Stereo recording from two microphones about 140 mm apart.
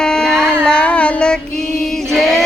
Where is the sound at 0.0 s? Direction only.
5° left (ahead or behind).